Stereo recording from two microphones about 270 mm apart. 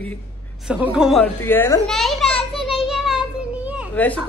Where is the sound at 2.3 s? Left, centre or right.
Left.